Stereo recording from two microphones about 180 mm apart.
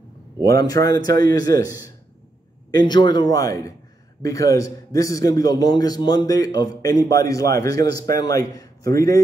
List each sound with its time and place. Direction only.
0.5 s a man's voice: 20° left (ahead or behind)